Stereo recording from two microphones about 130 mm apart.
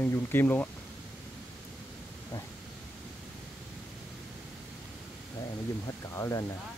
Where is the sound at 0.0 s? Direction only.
15° left (ahead or behind).